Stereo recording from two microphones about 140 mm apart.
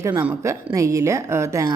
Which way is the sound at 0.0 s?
15° right (ahead or behind).